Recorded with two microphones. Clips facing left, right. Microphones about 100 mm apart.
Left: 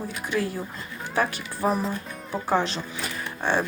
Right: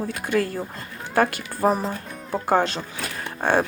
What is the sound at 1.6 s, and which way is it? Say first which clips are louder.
Speech: right 3 dB; 40° right (ahead or behind).